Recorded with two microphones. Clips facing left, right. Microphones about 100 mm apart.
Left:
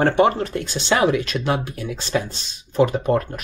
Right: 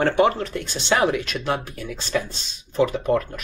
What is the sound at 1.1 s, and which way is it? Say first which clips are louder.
Speech: left 3 dB; 25° left (ahead or behind).